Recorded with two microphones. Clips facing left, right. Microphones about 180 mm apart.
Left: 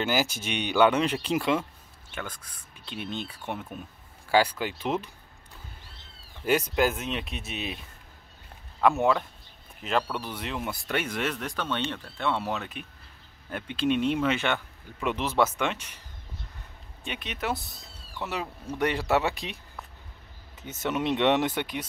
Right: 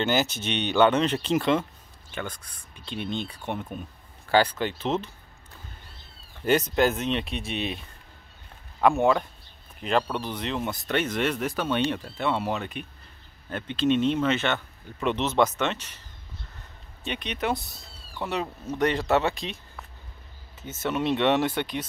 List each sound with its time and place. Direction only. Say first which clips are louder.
0.0 s speech: right 2 dB; 10° left (ahead or behind)
2.8 s speech: right 4 dB; 5° left (ahead or behind)
6.4 s speech: right 2 dB; 10° left (ahead or behind)
8.8 s speech: right 2 dB; centre (ahead or behind)
11.3 s speech: right 5 dB; 10° right (ahead or behind); by 16.0 s 10° left (ahead or behind)
17.0 s speech: right 4 dB; 5° left (ahead or behind)
20.6 s speech: right 1 dB; 15° left (ahead or behind)